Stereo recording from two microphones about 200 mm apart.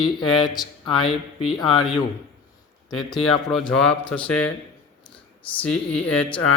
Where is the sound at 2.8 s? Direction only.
Centre (ahead or behind).